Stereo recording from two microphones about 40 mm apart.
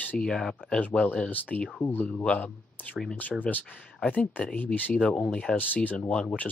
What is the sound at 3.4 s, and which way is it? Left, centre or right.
Speech, left.